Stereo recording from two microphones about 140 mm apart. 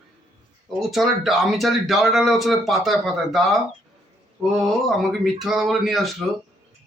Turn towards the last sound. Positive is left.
turn(degrees=0)  # may be behind; listen again after turning